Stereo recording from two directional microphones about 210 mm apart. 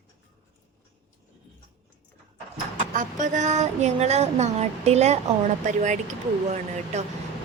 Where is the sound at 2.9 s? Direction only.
35° right (ahead or behind).